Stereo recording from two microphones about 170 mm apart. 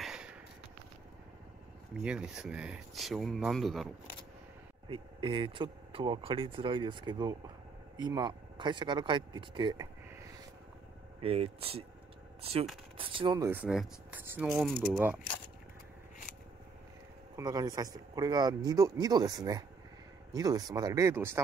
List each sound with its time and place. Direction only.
0.0 s a sound: 5° right (ahead or behind)
2.0 s speech: 5° right (ahead or behind)
4.8 s speech: 30° right (ahead or behind)
13.4 s speech: 10° right (ahead or behind)
17.4 s speech: 20° right (ahead or behind)